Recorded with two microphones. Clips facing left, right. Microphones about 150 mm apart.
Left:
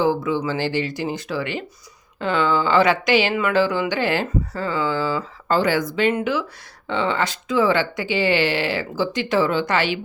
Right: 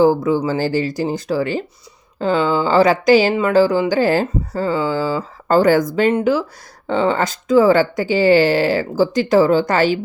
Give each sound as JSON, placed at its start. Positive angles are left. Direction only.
{"t": 0.0, "sound": "speech", "side_deg": -40}